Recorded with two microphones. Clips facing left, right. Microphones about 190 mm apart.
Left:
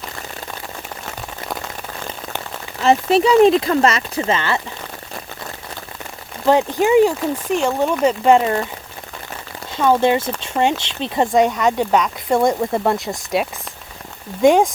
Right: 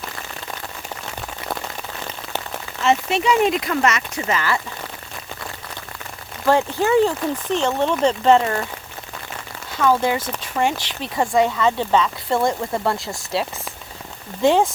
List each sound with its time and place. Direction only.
2.8 s speech: 35° left (ahead or behind)
6.4 s speech: 15° left (ahead or behind)
9.7 s speech: 25° left (ahead or behind)